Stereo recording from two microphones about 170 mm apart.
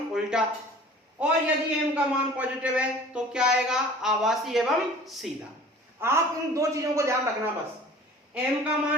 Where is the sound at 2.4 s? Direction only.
5° right (ahead or behind).